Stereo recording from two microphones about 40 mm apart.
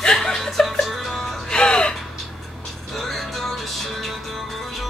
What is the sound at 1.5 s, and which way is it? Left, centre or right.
Music, left.